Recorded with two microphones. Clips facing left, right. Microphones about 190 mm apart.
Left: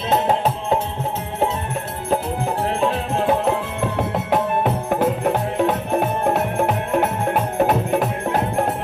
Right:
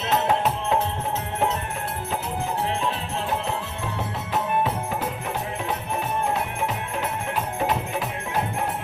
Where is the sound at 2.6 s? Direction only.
45° left (ahead or behind).